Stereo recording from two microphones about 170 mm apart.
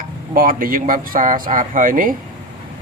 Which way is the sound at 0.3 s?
55° right (ahead or behind).